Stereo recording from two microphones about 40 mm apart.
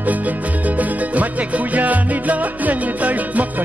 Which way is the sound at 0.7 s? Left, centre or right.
Right.